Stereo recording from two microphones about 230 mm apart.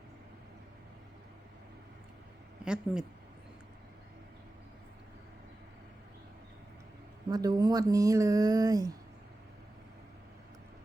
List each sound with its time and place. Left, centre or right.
2.6 s speech: centre
7.3 s speech: centre